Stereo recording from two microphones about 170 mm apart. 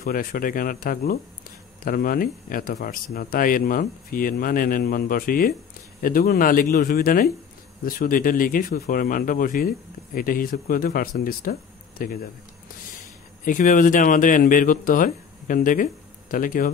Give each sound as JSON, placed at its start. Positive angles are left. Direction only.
{"t": 0.0, "sound": "speech", "side_deg": 55}
{"t": 13.5, "sound": "speech", "side_deg": 50}